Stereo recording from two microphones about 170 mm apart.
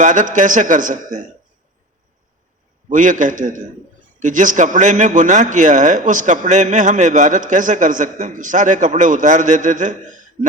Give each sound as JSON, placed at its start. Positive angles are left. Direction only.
{"t": 0.0, "sound": "a man's voice", "side_deg": -50}
{"t": 2.9, "sound": "a man's voice", "side_deg": -50}